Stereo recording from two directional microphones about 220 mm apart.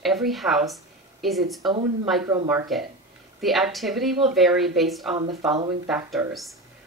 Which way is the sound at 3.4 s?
Centre (ahead or behind).